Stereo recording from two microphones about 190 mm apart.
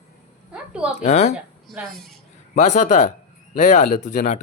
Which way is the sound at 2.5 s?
40° left (ahead or behind).